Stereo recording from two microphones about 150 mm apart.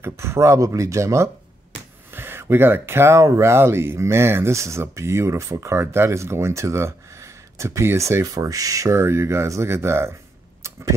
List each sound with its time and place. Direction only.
0.0 s speech: 20° right (ahead or behind)